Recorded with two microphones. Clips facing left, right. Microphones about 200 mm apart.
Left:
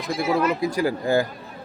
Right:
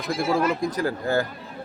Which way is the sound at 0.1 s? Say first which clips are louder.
Left 1 dB; centre (ahead or behind).